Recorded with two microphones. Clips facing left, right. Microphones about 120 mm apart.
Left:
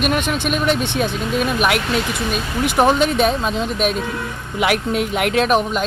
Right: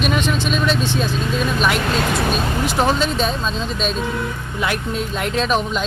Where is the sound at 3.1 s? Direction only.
65° left (ahead or behind).